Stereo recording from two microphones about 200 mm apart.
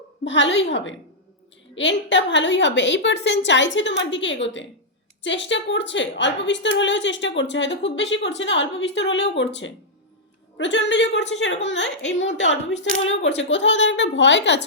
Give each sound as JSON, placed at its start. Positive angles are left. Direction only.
{"t": 0.3, "sound": "a woman's voice", "side_deg": 65}